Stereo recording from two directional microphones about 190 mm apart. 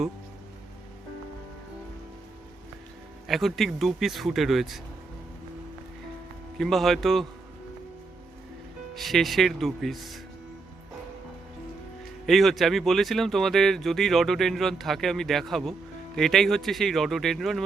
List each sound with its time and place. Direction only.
3.2 s speech: centre (ahead or behind)
6.6 s speech: centre (ahead or behind)
9.0 s speech: centre (ahead or behind)
12.2 s speech: centre (ahead or behind)